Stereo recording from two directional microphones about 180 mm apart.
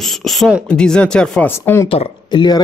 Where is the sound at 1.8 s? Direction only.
30° left (ahead or behind).